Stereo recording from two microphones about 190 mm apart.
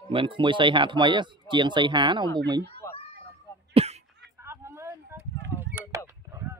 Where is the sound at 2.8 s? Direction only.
15° left (ahead or behind).